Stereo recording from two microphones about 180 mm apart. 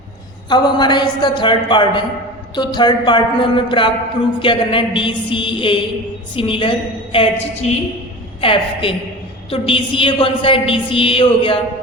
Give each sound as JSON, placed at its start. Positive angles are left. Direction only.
{"t": 0.4, "sound": "a woman's voice", "side_deg": 25}